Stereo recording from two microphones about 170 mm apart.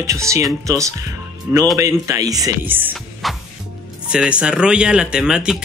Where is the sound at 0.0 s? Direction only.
20° right (ahead or behind).